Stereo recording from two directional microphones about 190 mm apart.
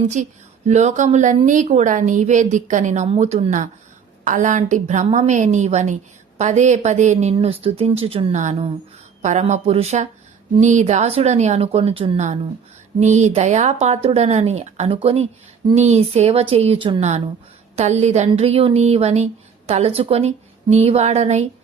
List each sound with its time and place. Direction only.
0.2 s a woman's voice: 40° right (ahead or behind)